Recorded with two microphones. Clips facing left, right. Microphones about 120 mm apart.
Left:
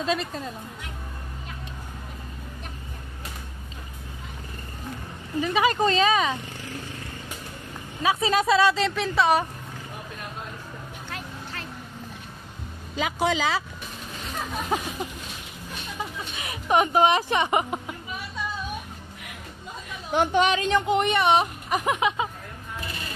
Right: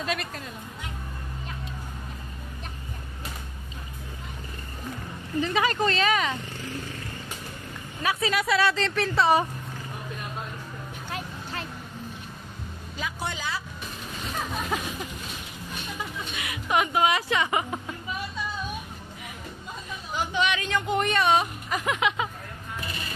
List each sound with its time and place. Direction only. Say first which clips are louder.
0.0 s speech: left 4 dB; 25° left (ahead or behind)
5.4 s speech: left 3 dB; 10° left (ahead or behind)
8.0 s speech: left 4 dB; 20° left (ahead or behind)
8.8 s a woman's voice: left 1 dB; centre (ahead or behind)
12.9 s speech: left 9 dB; 90° left
16.4 s speech: left 4 dB; 35° left (ahead or behind); by 17.9 s 20° left (ahead or behind)
20.1 s speech: left 6 dB; 60° left (ahead or behind)
20.4 s speech: left 5 dB; 30° left (ahead or behind)